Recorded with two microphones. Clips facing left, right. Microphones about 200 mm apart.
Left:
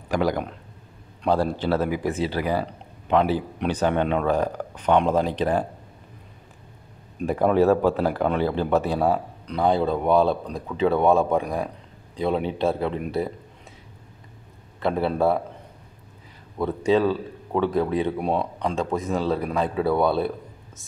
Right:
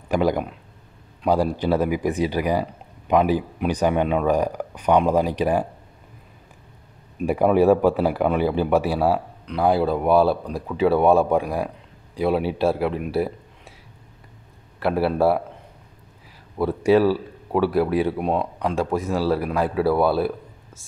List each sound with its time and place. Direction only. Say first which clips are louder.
0.1 s a man's voice: right 3 dB; 20° right (ahead or behind)
7.2 s a man's voice: right 2 dB; 10° right (ahead or behind)
14.8 s a man's voice: right 2 dB; 10° right (ahead or behind)
16.5 s a man's voice: right 3 dB; 10° right (ahead or behind)